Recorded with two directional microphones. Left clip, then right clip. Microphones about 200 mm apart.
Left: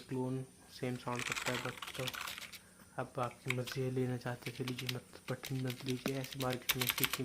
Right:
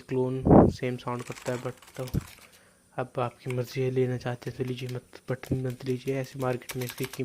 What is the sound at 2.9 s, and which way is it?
Speech, 35° right (ahead or behind).